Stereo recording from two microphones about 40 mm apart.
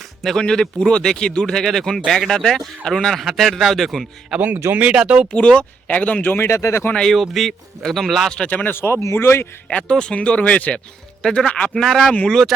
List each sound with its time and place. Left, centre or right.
0.2 s speech: centre
0.4 s a man's voice: centre
4.4 s speech: right
4.9 s speech: right
5.3 s speech: left
6.3 s speech: left
7.1 s a man's voice: centre
8.4 s speech: left
8.7 s speech: left
9.9 s speech: left
11.2 s speech: left
12.3 s speech: centre